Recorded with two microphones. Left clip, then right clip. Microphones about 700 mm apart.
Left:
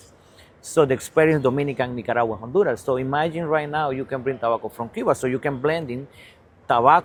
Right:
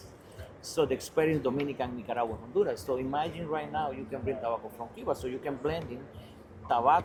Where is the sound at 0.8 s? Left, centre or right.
Left.